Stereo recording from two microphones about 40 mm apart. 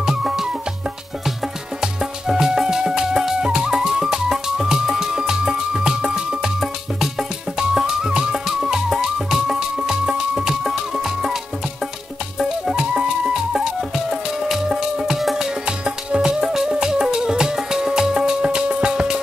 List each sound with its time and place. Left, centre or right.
0.0 s music: centre
1.8 s music: centre
6.6 s music: centre
13.5 s music: centre
15.6 s music: right